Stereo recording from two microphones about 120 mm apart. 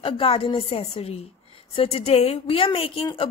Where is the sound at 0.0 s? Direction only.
50° left (ahead or behind).